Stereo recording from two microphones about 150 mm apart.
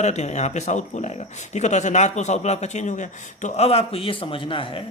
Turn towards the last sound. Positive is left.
turn(degrees=35)  # may be behind; listen again after turning